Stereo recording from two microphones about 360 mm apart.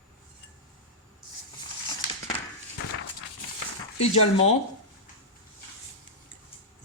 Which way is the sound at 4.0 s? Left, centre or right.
Centre.